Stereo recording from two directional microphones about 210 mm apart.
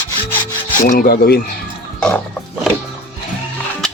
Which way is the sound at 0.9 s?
45° left (ahead or behind).